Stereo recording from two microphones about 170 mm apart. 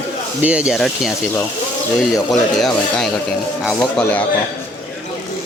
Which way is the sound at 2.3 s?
Centre (ahead or behind).